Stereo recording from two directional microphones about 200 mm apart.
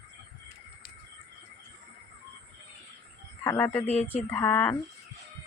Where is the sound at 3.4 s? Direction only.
10° left (ahead or behind).